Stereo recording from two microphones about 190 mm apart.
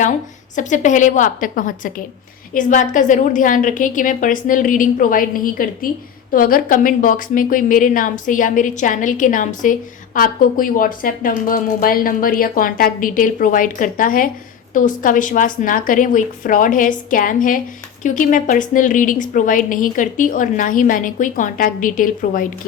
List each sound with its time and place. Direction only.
0.5 s a woman's voice: 40° left (ahead or behind)